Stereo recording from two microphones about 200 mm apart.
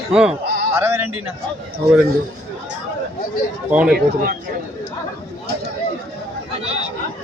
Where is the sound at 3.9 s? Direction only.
45° right (ahead or behind).